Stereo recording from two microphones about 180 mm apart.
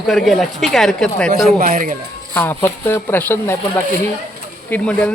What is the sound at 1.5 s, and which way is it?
Speech, 50° right (ahead or behind).